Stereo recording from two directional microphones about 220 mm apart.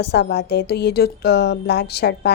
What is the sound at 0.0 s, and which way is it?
Speech, 50° left (ahead or behind).